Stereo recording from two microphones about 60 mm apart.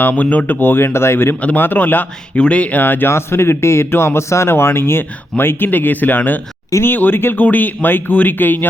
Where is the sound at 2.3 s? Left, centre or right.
Centre.